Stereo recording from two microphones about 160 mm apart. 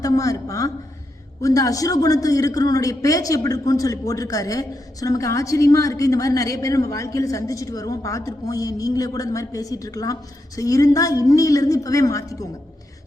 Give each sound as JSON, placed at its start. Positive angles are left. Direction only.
{"t": 0.0, "sound": "speech", "side_deg": 20}